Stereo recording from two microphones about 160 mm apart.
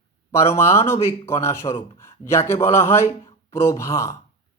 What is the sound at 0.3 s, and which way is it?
Speech, 15° left (ahead or behind).